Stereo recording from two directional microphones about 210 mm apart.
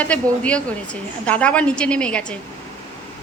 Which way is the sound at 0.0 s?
5° left (ahead or behind).